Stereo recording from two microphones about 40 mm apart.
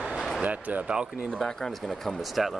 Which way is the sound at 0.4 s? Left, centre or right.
Right.